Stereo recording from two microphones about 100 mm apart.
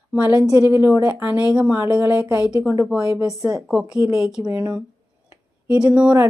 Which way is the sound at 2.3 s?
40° left (ahead or behind).